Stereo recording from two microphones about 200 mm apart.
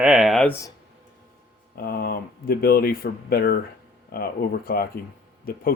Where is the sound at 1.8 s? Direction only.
50° left (ahead or behind).